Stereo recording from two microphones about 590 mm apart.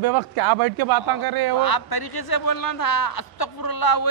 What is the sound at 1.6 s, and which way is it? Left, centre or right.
Speech, left.